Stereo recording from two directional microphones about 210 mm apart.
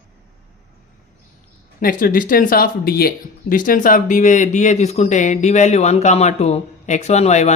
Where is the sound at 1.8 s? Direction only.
40° left (ahead or behind).